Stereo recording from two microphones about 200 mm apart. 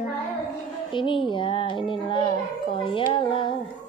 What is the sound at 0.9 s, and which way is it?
Child singing, 25° left (ahead or behind).